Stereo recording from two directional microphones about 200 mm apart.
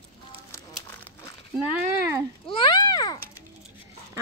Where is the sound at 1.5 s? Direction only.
10° right (ahead or behind).